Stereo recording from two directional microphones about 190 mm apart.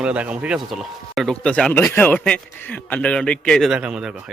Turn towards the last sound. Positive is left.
turn(degrees=-5)  # may be behind; listen again after turning